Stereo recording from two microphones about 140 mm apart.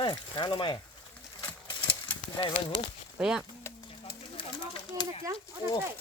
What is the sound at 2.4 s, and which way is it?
Speech, 35° left (ahead or behind).